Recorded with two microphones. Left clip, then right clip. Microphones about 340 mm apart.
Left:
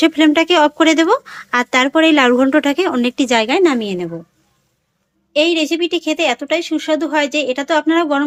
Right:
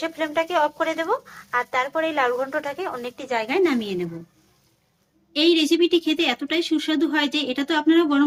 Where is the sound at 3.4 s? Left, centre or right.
Centre.